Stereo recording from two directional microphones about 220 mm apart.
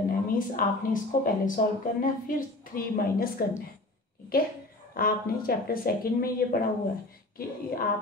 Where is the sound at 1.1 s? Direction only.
40° left (ahead or behind).